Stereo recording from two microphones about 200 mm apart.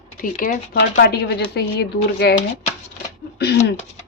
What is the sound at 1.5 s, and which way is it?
Speech, 55° left (ahead or behind).